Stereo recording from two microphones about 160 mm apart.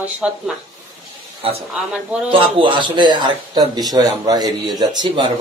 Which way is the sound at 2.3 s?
30° right (ahead or behind).